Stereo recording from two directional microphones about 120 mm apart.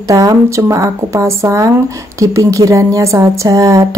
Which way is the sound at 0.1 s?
30° right (ahead or behind).